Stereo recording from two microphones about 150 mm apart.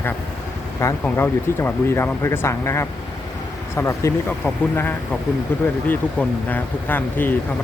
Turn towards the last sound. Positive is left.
turn(degrees=15)  # may be behind; listen again after turning